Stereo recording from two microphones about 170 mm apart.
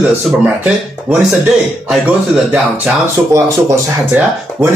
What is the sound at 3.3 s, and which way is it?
A man's voice, 15° right (ahead or behind).